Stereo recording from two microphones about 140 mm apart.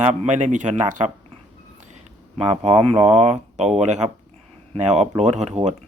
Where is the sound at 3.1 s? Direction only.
55° right (ahead or behind).